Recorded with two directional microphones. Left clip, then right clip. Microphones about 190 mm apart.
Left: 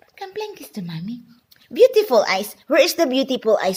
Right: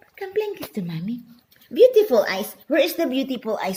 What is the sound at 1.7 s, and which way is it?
Speech, 50° left (ahead or behind).